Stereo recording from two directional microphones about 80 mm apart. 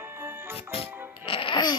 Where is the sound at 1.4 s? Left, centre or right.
Left.